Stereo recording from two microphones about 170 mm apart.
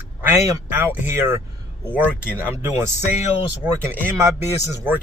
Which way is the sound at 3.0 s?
45° left (ahead or behind).